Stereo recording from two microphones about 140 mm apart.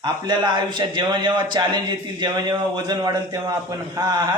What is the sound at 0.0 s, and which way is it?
A man's voice, 30° right (ahead or behind).